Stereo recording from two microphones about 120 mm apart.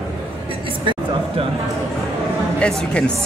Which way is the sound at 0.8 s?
50° right (ahead or behind).